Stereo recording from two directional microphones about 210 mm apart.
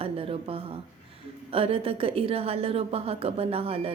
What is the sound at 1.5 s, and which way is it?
A woman's voice, 25° right (ahead or behind).